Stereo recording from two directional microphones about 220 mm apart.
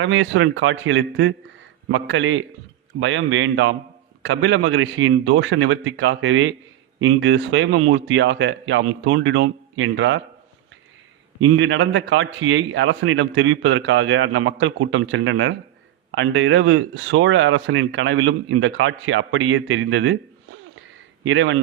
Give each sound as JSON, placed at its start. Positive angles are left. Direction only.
{"t": 0.0, "sound": "speech", "side_deg": -60}
{"t": 11.3, "sound": "speech", "side_deg": -60}